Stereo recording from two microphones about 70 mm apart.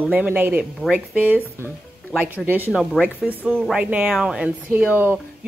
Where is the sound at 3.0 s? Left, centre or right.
Centre.